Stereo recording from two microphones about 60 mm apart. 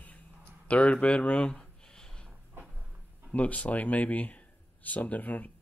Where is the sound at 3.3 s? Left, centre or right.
Left.